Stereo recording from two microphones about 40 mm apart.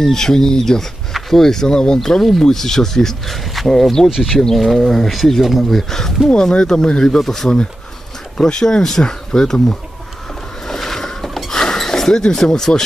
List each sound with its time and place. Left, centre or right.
0.0 s speech: centre
7.2 s speech: centre
10.7 s boat: centre
11.5 s a sound: centre